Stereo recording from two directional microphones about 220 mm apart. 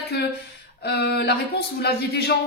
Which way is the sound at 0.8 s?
50° left (ahead or behind).